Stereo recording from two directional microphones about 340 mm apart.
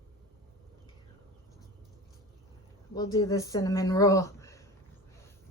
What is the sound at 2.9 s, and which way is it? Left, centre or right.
Speech, centre.